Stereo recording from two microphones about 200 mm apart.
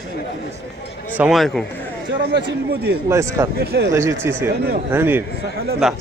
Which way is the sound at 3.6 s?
55° right (ahead or behind).